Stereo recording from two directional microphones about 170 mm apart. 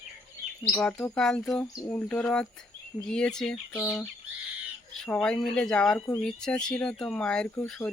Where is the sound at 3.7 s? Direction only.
15° left (ahead or behind).